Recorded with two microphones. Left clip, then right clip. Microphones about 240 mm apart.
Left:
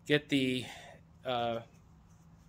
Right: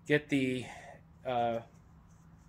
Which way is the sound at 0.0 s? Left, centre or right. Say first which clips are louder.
Even; centre.